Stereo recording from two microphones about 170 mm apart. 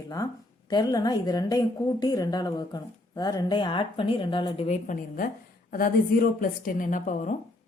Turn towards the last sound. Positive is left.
turn(degrees=45)  # may be behind; listen again after turning